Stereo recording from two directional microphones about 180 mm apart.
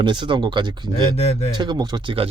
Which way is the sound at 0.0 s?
25° right (ahead or behind).